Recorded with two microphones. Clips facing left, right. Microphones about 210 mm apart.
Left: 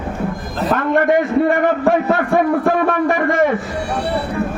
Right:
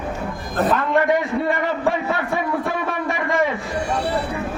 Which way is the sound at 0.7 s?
50° left (ahead or behind).